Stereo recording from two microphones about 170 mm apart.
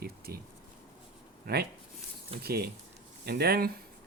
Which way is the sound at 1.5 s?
65° right (ahead or behind).